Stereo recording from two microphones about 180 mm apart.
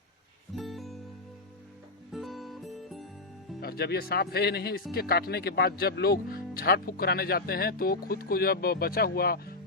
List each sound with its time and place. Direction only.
0.5 s music: centre (ahead or behind)
2.1 s music: centre (ahead or behind)
3.6 s speech: 60° left (ahead or behind)